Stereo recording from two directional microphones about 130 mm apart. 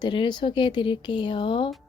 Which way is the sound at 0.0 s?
35° left (ahead or behind).